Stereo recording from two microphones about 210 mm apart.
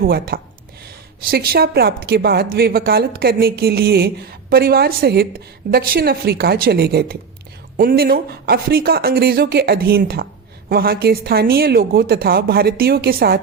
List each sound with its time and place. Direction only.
0.0 s a woman's voice: 45° right (ahead or behind)